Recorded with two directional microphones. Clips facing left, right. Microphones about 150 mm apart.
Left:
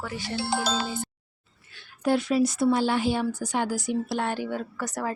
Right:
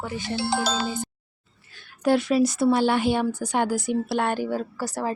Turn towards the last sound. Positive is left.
turn(degrees=-30)  # may be behind; listen again after turning